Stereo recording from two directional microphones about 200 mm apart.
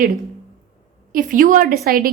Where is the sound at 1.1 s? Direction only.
45° right (ahead or behind).